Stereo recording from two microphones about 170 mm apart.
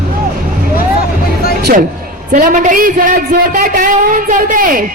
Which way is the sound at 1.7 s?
60° right (ahead or behind).